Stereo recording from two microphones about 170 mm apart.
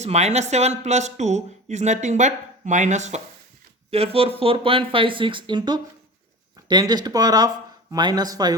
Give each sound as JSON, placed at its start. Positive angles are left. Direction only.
{"t": 0.0, "sound": "speech", "side_deg": -40}